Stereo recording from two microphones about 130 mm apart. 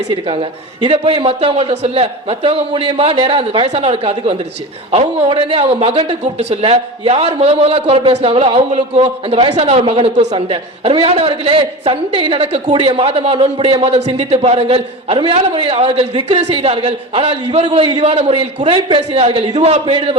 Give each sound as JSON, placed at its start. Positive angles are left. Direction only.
{"t": 0.3, "sound": "a man's voice", "side_deg": -40}
{"t": 16.4, "sound": "a man's voice", "side_deg": -55}